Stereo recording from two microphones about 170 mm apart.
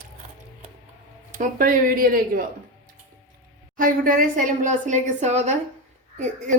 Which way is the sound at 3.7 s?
55° right (ahead or behind).